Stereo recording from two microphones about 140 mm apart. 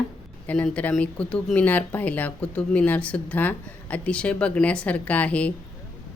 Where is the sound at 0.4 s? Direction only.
10° left (ahead or behind).